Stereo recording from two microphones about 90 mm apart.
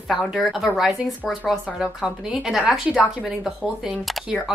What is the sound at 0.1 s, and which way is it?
Speech, centre (ahead or behind).